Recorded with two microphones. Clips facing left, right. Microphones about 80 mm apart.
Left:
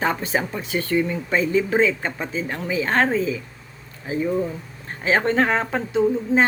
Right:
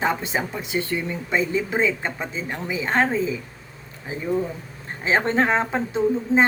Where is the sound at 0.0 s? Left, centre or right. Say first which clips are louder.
Left 1 dB; centre.